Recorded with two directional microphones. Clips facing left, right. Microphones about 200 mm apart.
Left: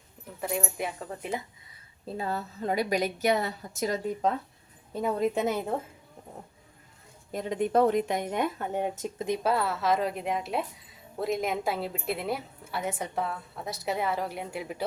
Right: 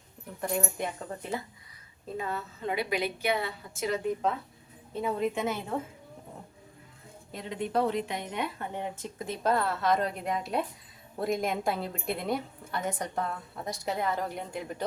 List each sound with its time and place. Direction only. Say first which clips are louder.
0.4 s a woman's voice: even; 5° left (ahead or behind)
2.0 s a woman's voice: left 2 dB; 35° left (ahead or behind)
7.3 s speech: left 5 dB; 45° left (ahead or behind)
9.1 s a woman's voice: even; 15° left (ahead or behind)